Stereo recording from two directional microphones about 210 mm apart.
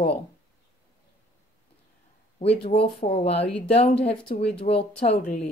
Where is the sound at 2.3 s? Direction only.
30° left (ahead or behind).